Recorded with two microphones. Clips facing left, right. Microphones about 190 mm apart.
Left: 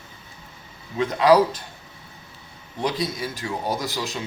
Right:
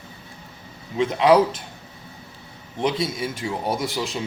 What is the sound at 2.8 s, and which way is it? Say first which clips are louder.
Speech: right 2 dB; 25° right (ahead or behind).